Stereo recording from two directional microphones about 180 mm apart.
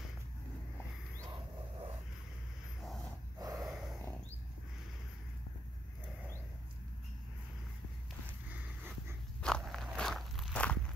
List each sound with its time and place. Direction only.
2.8 s dog: centre (ahead or behind)
3.3 s snort: 20° right (ahead or behind)
3.6 s a sound: centre (ahead or behind)
9.4 s biting: centre (ahead or behind)